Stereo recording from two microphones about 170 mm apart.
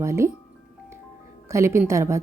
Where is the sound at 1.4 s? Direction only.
15° right (ahead or behind).